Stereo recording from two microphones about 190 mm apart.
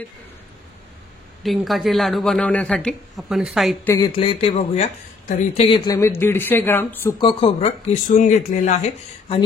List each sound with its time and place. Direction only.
1.4 s speech: centre (ahead or behind)
3.8 s speech: 15° left (ahead or behind)
4.2 s speech: 30° left (ahead or behind)
5.9 s speech: 15° left (ahead or behind)
7.2 s speech: 25° left (ahead or behind)
8.2 s speech: 40° left (ahead or behind)